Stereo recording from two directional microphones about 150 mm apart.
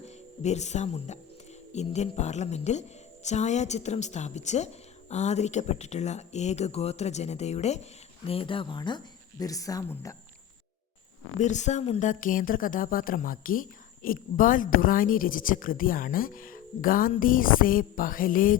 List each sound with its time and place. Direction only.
0.0 s a woman's voice: 50° left (ahead or behind)
8.3 s a woman's voice: 35° left (ahead or behind); by 10.2 s 20° left (ahead or behind)
11.3 s speech: 50° left (ahead or behind)